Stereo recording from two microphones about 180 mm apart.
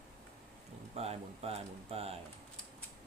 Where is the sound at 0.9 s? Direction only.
35° right (ahead or behind).